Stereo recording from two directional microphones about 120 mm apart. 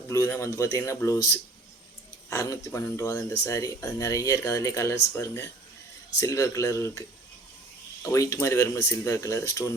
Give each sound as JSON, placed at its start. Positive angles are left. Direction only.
{"t": 0.1, "sound": "speech", "side_deg": 25}
{"t": 8.0, "sound": "speech", "side_deg": 25}